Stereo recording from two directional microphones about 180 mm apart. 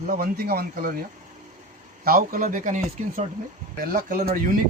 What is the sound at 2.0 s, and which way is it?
Speech, 55° right (ahead or behind).